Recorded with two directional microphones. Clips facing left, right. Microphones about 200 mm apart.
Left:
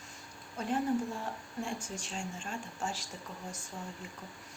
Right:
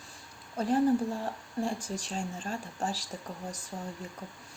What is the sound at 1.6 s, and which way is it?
Speech, 35° right (ahead or behind).